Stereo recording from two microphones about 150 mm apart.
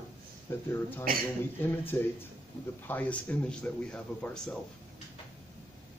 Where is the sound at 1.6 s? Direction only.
15° left (ahead or behind).